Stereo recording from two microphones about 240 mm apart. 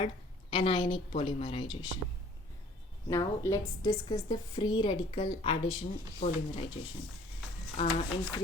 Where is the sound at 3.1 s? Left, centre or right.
Centre.